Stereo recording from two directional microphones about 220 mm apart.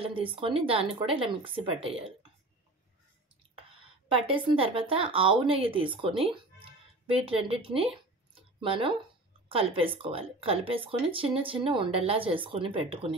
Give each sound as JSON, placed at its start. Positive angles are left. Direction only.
{"t": 0.0, "sound": "speech", "side_deg": -25}
{"t": 4.1, "sound": "speech", "side_deg": -25}